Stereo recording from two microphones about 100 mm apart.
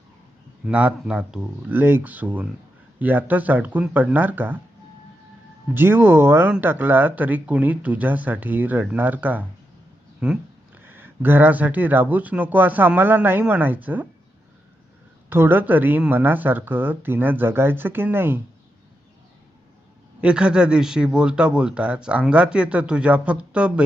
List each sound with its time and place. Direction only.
0.7 s speech: 10° right (ahead or behind)
5.7 s speech: 20° right (ahead or behind)
10.8 s speech: 20° right (ahead or behind)
15.3 s speech: 20° right (ahead or behind)
20.2 s speech: 10° right (ahead or behind)